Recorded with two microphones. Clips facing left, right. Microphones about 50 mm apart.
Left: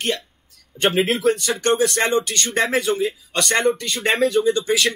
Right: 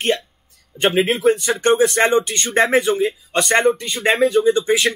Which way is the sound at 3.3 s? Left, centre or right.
Right.